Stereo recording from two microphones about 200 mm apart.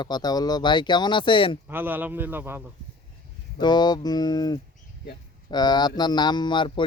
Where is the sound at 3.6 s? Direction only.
20° left (ahead or behind).